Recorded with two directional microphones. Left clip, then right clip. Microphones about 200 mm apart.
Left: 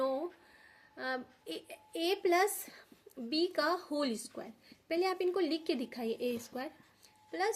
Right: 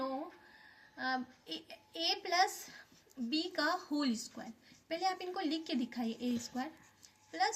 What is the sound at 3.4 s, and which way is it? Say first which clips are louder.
A woman's voice: left 4 dB; 50° left (ahead or behind).